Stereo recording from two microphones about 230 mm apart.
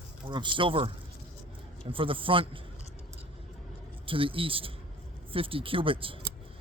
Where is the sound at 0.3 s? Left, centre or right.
Right.